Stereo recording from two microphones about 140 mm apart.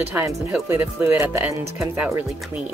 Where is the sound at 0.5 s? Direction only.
15° right (ahead or behind).